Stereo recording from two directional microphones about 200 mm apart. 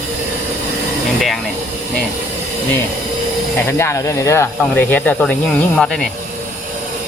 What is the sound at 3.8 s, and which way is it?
Speech, 15° left (ahead or behind).